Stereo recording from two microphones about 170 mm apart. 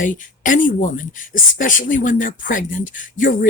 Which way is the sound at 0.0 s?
50° left (ahead or behind).